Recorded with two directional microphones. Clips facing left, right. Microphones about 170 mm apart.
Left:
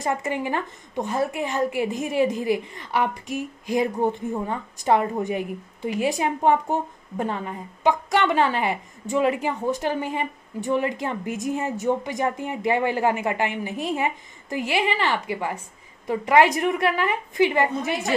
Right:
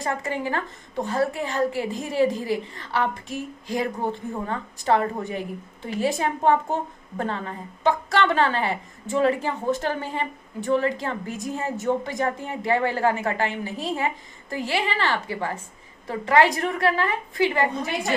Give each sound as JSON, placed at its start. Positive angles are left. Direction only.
{"t": 0.0, "sound": "a woman's voice", "side_deg": 20}